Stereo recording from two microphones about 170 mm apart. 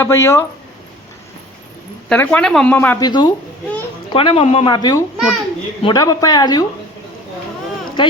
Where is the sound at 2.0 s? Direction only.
10° left (ahead or behind).